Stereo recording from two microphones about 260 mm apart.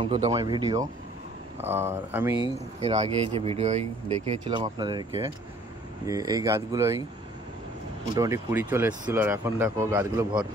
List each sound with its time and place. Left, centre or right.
0.0 s speech: centre
2.4 s speech: right
6.0 s speech: centre
8.1 s speech: centre